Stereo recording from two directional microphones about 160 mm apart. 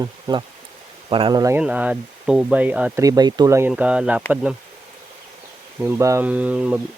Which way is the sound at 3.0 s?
25° right (ahead or behind).